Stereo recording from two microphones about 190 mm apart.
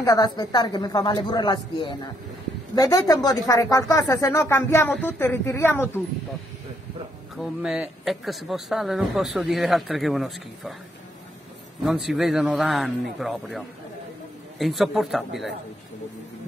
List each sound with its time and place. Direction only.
0.0 s a woman's voice: 20° left (ahead or behind)
7.6 s speech: 5° right (ahead or behind)
11.8 s speech: centre (ahead or behind)